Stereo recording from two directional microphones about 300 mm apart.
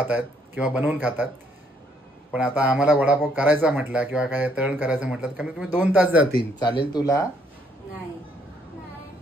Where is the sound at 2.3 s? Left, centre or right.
Centre.